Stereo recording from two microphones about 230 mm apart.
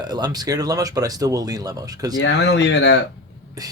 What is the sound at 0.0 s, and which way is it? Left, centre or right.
Speech, centre.